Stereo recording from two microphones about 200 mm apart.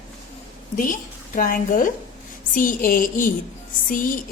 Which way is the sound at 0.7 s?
40° left (ahead or behind).